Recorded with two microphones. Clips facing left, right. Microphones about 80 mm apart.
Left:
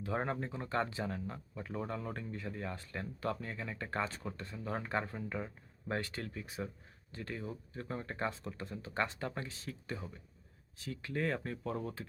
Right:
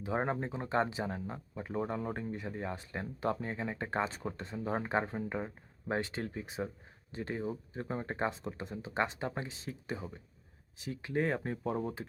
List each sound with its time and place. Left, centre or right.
0.0 s speech: right